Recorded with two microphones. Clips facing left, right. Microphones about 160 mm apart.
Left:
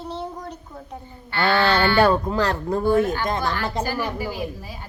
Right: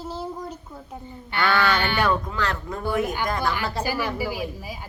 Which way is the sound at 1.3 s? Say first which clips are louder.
Left 3 dB; 25° left (ahead or behind).